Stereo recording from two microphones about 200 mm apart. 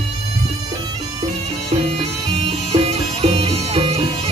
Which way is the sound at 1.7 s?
30° right (ahead or behind).